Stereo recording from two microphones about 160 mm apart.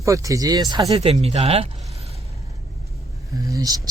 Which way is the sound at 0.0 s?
20° right (ahead or behind).